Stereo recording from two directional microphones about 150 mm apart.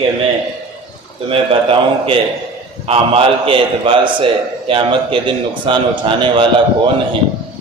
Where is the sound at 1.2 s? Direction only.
35° right (ahead or behind).